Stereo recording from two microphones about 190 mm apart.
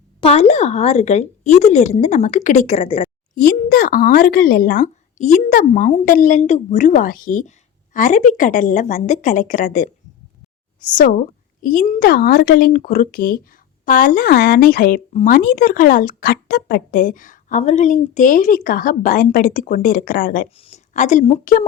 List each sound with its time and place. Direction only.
0.2 s a woman's voice: 35° left (ahead or behind)
3.3 s a woman's voice: 45° left (ahead or behind)
20.6 s a woman's voice: 35° left (ahead or behind)